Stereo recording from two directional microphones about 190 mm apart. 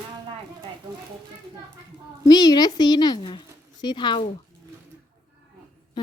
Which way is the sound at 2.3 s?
20° left (ahead or behind).